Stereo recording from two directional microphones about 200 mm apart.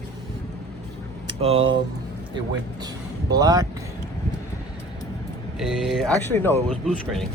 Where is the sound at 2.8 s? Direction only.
20° right (ahead or behind).